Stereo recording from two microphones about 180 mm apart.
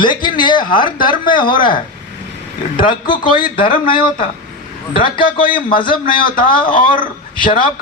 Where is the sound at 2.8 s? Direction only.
25° left (ahead or behind).